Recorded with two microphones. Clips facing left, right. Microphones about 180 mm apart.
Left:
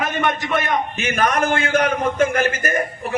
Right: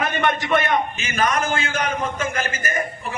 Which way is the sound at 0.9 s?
60° left (ahead or behind).